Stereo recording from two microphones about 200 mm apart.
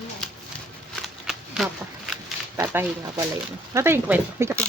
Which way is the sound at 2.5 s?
10° right (ahead or behind).